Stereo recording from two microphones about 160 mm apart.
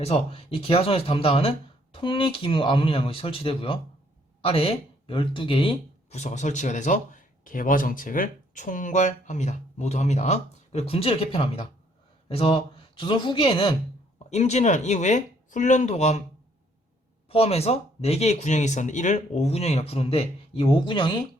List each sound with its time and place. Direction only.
0.0 s speech: 40° left (ahead or behind)
17.2 s speech: 40° left (ahead or behind)